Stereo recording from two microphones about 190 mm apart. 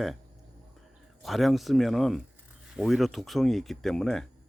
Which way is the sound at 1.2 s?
Centre (ahead or behind).